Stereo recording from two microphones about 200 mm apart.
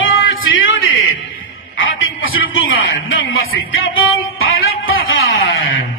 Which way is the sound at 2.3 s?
85° left.